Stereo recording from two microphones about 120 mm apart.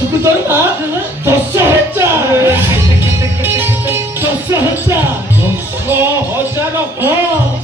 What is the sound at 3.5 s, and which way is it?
Music, 20° right (ahead or behind).